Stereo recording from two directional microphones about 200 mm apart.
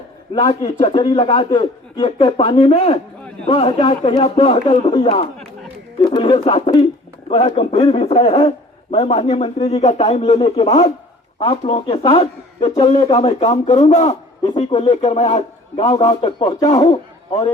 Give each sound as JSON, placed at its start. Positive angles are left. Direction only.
{"t": 0.4, "sound": "a man's voice", "side_deg": 30}